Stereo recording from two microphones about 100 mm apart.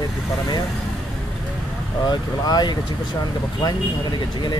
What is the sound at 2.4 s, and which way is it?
Speech, 45° left (ahead or behind).